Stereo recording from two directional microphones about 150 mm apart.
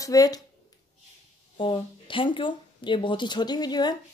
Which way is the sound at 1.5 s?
35° left (ahead or behind).